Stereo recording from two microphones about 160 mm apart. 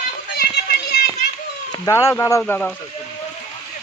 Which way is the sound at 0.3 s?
80° left.